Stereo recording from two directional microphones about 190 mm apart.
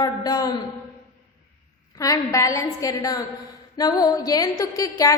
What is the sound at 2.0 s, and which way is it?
A woman's voice, 15° left (ahead or behind).